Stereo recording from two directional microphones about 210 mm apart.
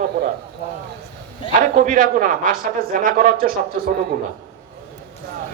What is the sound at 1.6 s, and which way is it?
Speech, 40° right (ahead or behind).